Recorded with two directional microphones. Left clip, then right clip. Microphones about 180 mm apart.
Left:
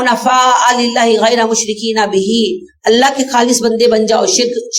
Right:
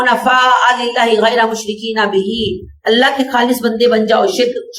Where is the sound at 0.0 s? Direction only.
30° left (ahead or behind).